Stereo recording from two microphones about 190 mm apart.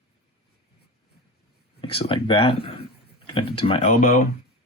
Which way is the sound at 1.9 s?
25° left (ahead or behind).